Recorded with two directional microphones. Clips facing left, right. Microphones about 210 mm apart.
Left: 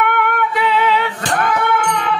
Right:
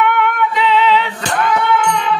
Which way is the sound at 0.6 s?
50° left (ahead or behind).